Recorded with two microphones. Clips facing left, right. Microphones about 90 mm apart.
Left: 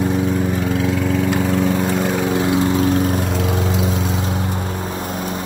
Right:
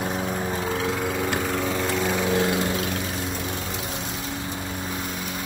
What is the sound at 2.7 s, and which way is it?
Lawn mower, 40° left (ahead or behind).